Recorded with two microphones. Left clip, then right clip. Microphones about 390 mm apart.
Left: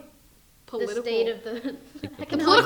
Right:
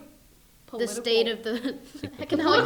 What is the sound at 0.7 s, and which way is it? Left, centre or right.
A woman's voice, right.